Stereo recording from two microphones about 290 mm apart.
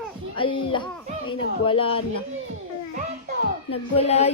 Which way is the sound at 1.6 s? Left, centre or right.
Centre.